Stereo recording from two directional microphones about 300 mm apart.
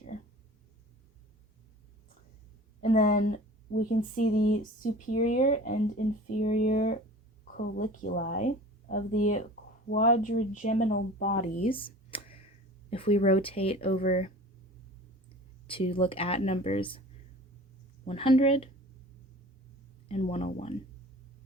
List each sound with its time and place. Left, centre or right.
2.8 s speech: left
15.6 s speech: centre
18.0 s speech: centre
20.1 s speech: centre